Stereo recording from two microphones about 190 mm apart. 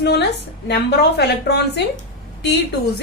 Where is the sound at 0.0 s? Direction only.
60° left (ahead or behind).